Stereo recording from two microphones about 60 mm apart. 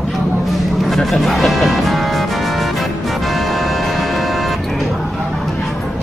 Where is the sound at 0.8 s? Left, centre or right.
Centre.